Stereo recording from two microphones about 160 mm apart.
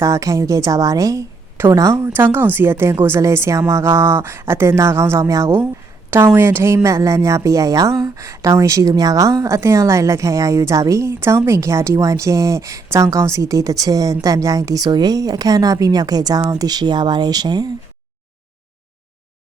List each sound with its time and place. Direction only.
0.0 s a woman's voice: 20° right (ahead or behind)